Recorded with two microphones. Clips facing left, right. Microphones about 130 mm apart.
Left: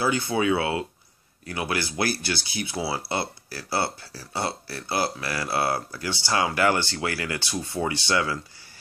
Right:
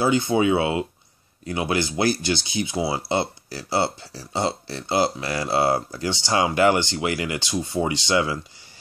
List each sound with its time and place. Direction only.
0.0 s speech: 20° right (ahead or behind)